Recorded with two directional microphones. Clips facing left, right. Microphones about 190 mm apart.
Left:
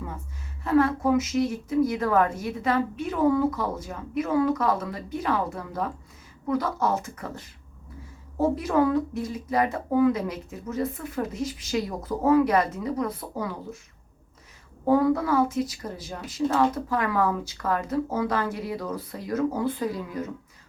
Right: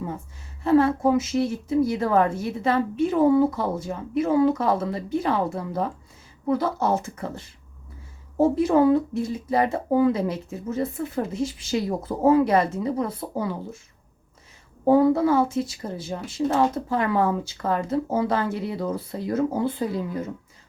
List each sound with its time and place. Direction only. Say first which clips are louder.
0.6 s speech: right 3 dB; 25° right (ahead or behind)
14.8 s speech: right 4 dB; 25° right (ahead or behind)